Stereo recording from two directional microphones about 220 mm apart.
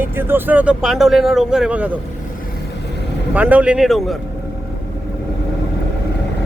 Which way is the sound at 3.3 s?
5° right (ahead or behind).